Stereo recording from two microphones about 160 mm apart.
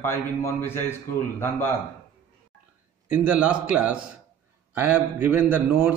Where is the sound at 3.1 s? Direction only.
10° right (ahead or behind).